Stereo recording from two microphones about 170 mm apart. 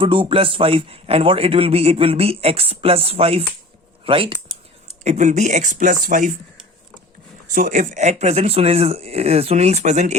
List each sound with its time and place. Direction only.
0.0 s a man's voice: 30° right (ahead or behind)
5.0 s speech: 45° right (ahead or behind)
7.5 s a man's voice: 50° right (ahead or behind)